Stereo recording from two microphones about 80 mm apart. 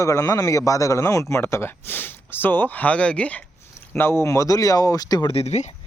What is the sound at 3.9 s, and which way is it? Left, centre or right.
Speech, left.